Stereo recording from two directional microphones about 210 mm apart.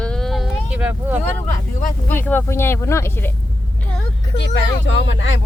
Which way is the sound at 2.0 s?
10° left (ahead or behind).